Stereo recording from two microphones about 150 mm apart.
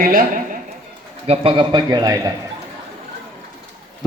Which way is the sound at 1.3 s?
35° right (ahead or behind).